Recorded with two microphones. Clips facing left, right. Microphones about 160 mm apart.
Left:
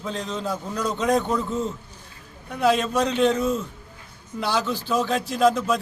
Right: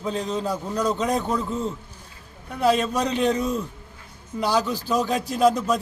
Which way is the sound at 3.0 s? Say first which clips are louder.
Left 3 dB; 5° right (ahead or behind).